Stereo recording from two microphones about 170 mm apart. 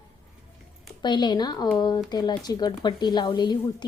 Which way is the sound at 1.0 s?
25° left (ahead or behind).